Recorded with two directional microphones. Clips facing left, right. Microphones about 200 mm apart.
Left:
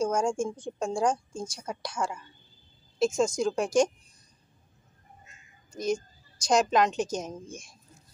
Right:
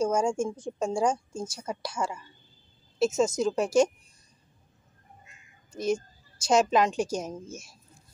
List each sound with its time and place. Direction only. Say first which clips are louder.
0.0 s a woman's voice: right 1 dB; 5° right (ahead or behind)
5.7 s a woman's voice: right 1 dB; 5° right (ahead or behind)